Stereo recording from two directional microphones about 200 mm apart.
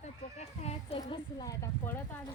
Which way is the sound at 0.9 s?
20° left (ahead or behind).